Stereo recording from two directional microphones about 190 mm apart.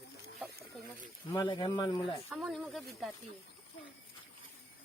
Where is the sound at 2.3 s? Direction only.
Centre (ahead or behind).